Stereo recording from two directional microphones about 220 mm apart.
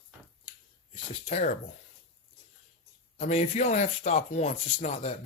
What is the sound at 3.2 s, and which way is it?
Speech, 30° left (ahead or behind).